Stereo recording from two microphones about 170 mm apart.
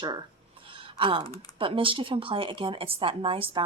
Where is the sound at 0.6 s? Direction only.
30° right (ahead or behind).